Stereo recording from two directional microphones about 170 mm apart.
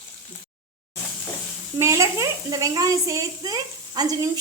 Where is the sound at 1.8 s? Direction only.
15° right (ahead or behind).